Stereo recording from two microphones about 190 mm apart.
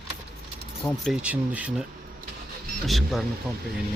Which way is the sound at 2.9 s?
Centre (ahead or behind).